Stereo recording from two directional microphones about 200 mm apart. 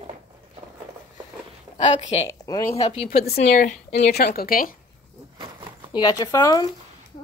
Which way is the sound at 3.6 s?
50° left (ahead or behind).